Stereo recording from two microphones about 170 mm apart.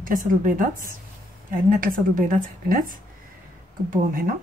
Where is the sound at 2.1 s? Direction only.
50° right (ahead or behind).